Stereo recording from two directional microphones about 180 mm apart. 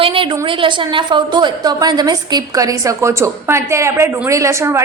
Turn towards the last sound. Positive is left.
turn(degrees=-15)  # may be behind; listen again after turning